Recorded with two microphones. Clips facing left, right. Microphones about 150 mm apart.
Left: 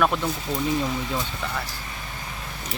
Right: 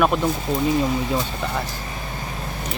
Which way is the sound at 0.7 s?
35° right (ahead or behind).